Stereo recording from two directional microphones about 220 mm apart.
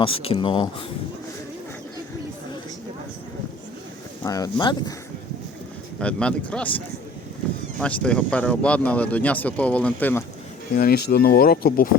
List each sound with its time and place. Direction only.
0.0 s speech: 25° left (ahead or behind)
4.2 s speech: 15° left (ahead or behind)
6.0 s speech: 5° left (ahead or behind)
10.8 s speech: 45° left (ahead or behind)